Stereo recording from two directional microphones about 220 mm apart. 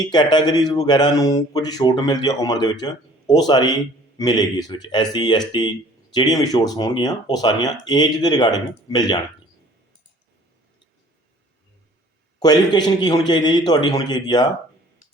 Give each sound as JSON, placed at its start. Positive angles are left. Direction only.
{"t": 0.0, "sound": "a man's voice", "side_deg": 20}
{"t": 12.4, "sound": "a man's voice", "side_deg": 20}